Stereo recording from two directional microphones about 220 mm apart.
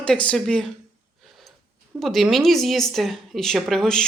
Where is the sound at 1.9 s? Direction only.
Centre (ahead or behind).